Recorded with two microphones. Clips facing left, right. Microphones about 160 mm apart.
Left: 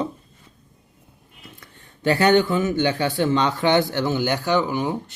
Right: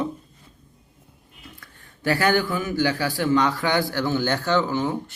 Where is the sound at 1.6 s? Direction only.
20° left (ahead or behind).